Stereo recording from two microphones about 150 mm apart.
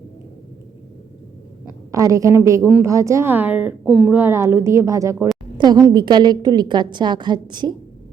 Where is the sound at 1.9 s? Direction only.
20° right (ahead or behind).